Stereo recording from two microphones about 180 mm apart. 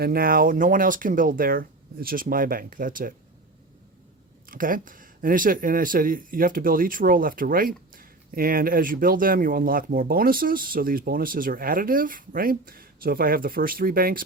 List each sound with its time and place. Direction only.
0.0 s speech: 55° right (ahead or behind)
4.4 s speech: 50° right (ahead or behind)